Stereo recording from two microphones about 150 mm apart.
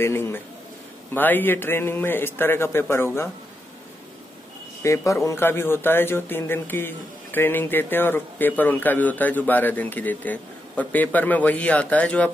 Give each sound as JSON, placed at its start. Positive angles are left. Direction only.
{"t": 0.0, "sound": "a man's voice", "side_deg": 15}
{"t": 4.8, "sound": "a man's voice", "side_deg": 20}